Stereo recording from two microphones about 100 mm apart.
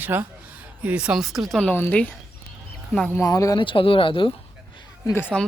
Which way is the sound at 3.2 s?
35° left (ahead or behind).